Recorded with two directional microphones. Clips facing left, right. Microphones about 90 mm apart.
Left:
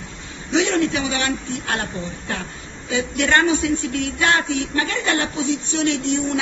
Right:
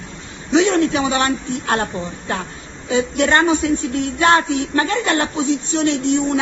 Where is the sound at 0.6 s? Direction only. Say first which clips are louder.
Right 4 dB; 35° right (ahead or behind).